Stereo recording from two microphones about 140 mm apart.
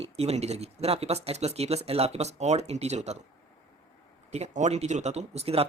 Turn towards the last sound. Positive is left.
turn(degrees=-45)  # may be behind; listen again after turning